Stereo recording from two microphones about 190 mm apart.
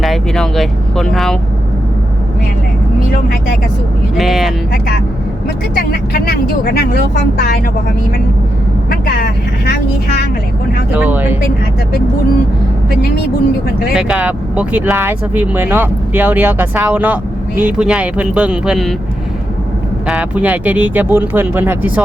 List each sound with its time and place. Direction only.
0.0 s speech: centre (ahead or behind)
4.2 s speech: centre (ahead or behind)
5.7 s speech: 55° left (ahead or behind)
8.9 s vehicle: 55° left (ahead or behind)
10.9 s speech: 10° right (ahead or behind)
13.9 s speech: 5° right (ahead or behind)
20.1 s speech: 5° right (ahead or behind)